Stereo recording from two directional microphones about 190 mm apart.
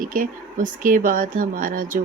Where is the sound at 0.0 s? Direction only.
45° right (ahead or behind).